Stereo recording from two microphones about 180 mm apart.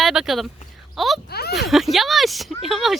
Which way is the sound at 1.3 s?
60° left (ahead or behind).